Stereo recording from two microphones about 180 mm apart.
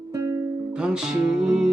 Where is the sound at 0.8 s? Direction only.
5° right (ahead or behind).